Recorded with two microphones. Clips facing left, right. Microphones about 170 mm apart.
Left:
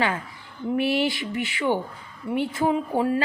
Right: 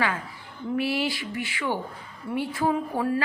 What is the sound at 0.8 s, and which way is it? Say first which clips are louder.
A woman's voice: left 3 dB; 20° left (ahead or behind).